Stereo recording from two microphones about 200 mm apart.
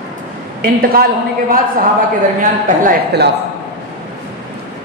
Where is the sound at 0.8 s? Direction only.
50° right (ahead or behind).